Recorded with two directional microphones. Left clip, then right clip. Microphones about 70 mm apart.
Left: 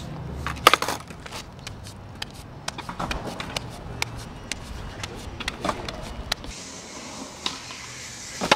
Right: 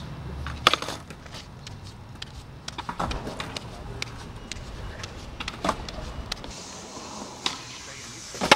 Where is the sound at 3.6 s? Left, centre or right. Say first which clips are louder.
Left 5 dB; left.